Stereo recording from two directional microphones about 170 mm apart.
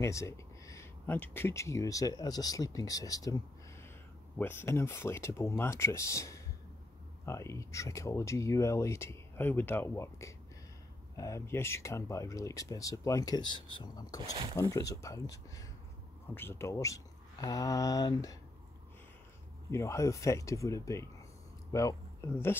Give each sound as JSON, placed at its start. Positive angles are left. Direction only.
{"t": 0.0, "sound": "speech", "side_deg": 15}
{"t": 19.7, "sound": "speech", "side_deg": 15}